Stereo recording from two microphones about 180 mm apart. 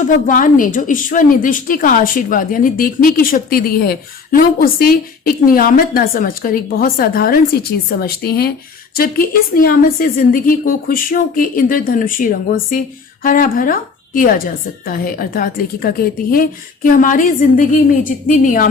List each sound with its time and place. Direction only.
0.3 s a woman's voice: 50° left (ahead or behind)